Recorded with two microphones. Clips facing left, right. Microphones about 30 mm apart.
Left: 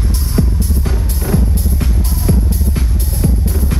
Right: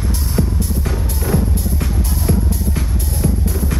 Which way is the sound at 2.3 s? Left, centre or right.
Centre.